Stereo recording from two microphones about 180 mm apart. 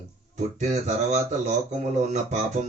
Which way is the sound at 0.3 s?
40° right (ahead or behind).